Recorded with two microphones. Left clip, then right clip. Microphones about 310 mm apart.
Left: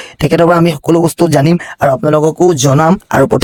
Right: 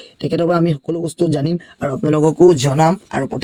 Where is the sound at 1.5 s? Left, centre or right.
Left.